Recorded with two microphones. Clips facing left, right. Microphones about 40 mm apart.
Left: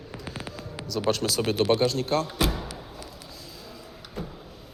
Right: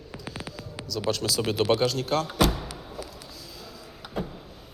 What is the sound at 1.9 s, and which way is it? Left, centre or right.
Speech, left.